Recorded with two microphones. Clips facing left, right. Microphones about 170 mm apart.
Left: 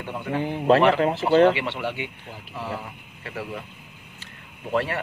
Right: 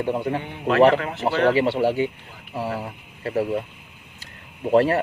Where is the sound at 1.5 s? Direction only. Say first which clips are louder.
Right 8 dB; 35° right (ahead or behind).